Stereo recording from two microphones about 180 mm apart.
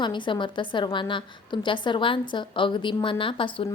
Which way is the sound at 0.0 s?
25° left (ahead or behind).